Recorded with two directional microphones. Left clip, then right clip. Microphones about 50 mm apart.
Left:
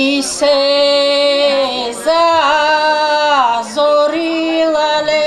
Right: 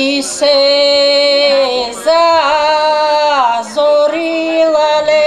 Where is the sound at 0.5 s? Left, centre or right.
Centre.